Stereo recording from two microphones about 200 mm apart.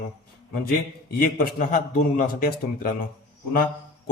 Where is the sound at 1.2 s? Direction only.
45° left (ahead or behind).